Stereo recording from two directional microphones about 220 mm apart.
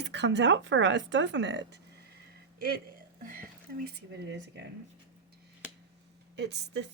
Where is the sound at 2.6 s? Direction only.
45° right (ahead or behind).